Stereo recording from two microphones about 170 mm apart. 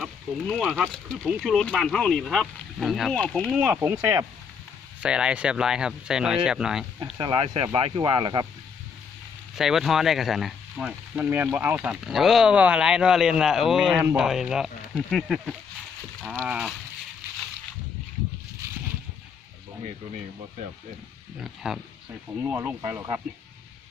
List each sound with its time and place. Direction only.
0.0 s speech: centre (ahead or behind)
3.7 s speech: 10° right (ahead or behind)
7.2 s speech: 25° right (ahead or behind)
9.6 s speech: centre (ahead or behind)
21.4 s speech: 5° right (ahead or behind)